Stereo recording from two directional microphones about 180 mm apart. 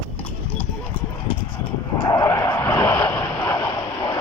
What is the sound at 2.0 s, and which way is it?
Vehicle, 25° left (ahead or behind).